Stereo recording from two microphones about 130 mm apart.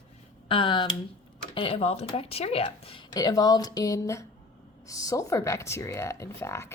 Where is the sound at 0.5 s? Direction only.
40° left (ahead or behind).